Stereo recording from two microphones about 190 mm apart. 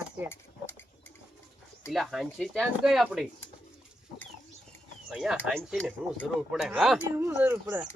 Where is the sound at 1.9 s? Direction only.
Centre (ahead or behind).